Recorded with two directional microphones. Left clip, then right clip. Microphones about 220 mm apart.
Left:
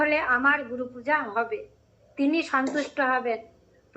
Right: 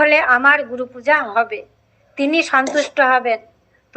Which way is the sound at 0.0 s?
40° right (ahead or behind).